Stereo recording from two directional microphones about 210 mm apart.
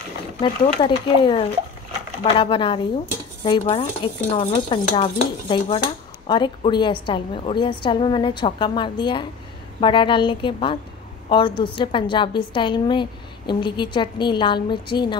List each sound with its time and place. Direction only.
0.4 s a woman's voice: 25° left (ahead or behind)